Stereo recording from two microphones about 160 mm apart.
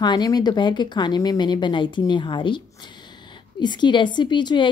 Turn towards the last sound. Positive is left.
turn(degrees=30)  # may be behind; listen again after turning